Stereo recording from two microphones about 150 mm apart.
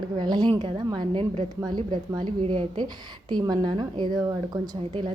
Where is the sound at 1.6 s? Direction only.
25° right (ahead or behind).